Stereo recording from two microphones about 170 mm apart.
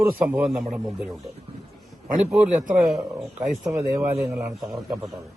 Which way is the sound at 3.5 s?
15° right (ahead or behind).